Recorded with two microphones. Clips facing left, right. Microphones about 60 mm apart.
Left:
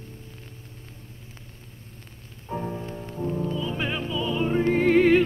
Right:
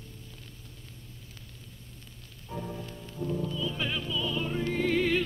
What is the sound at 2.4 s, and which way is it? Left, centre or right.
Music, left.